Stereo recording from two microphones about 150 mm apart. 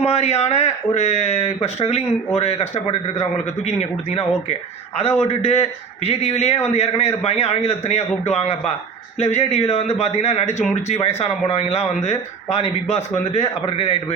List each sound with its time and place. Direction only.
0.0 s speech: 45° left (ahead or behind)